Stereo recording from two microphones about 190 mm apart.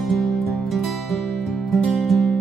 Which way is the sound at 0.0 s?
Centre (ahead or behind).